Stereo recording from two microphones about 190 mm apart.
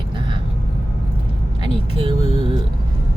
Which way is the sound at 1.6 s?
30° right (ahead or behind).